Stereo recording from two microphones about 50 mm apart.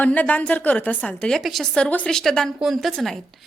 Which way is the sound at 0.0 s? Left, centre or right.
Left.